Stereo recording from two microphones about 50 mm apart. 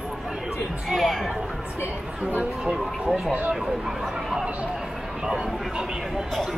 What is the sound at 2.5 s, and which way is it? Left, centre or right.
Speech, centre.